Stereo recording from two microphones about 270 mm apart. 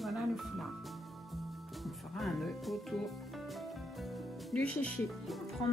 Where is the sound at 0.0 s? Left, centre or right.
Centre.